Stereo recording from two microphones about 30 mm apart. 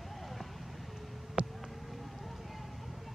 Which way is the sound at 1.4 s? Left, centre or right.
Right.